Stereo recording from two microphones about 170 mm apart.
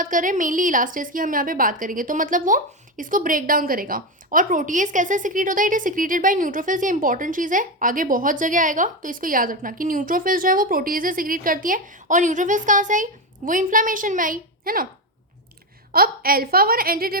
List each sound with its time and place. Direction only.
0.0 s a woman's voice: 50° right (ahead or behind)
15.9 s a woman's voice: 60° right (ahead or behind)